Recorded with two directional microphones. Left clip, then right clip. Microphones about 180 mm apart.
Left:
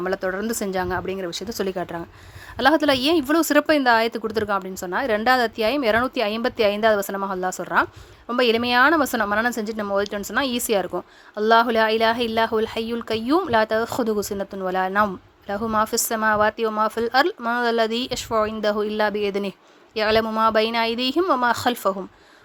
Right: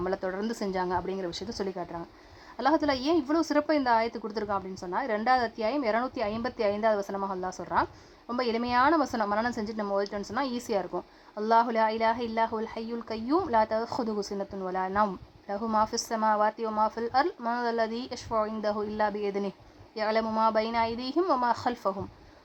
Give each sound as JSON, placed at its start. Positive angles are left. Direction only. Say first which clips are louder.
{"t": 0.0, "sound": "a woman's voice", "louder": "left 7 dB", "side_deg": 30}
{"t": 14.1, "sound": "speech", "louder": "left 9 dB", "side_deg": 60}
{"t": 14.3, "sound": "a woman's voice", "louder": "left 8 dB", "side_deg": 35}